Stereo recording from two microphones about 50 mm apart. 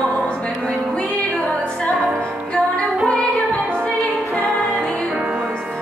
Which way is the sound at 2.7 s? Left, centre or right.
Centre.